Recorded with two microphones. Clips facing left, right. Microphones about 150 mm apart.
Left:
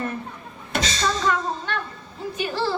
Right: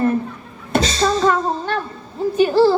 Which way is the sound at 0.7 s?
35° right (ahead or behind).